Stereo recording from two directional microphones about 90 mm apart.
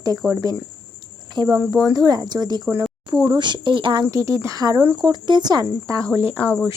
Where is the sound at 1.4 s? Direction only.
50° right (ahead or behind).